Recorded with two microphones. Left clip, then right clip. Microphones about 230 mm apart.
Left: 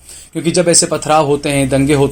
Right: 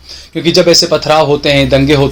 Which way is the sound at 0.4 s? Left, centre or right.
Left.